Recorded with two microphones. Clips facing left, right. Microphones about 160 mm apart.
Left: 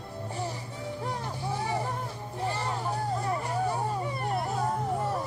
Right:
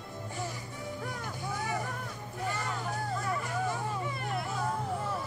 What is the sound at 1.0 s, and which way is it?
Music, 30° left (ahead or behind).